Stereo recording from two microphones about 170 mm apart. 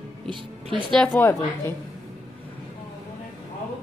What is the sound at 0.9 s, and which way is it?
Speech, 10° left (ahead or behind).